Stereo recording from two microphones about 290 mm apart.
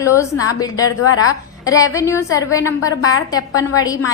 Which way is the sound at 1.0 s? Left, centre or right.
Left.